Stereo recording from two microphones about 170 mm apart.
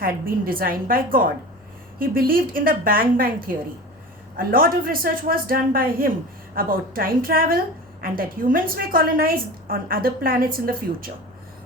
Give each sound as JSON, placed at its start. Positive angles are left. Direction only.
{"t": 0.0, "sound": "a woman's voice", "side_deg": -55}